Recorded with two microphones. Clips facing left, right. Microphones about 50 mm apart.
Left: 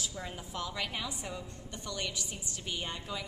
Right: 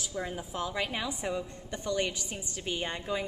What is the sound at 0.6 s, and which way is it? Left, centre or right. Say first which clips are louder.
A woman's voice: right 4 dB; right.